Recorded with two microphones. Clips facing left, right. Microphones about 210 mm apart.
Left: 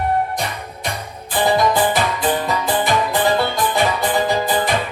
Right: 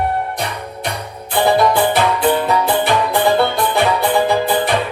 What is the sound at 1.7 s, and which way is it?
Music, 65° right (ahead or behind).